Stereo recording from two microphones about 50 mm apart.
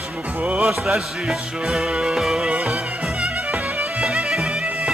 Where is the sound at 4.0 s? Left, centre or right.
Centre.